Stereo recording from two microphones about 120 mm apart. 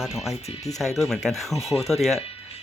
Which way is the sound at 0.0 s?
Centre (ahead or behind).